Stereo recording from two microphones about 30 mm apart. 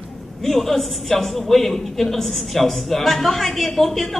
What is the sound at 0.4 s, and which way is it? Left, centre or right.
A man's voice, centre.